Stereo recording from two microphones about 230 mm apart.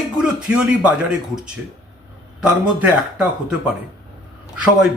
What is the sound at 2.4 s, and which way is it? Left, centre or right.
Speech, centre.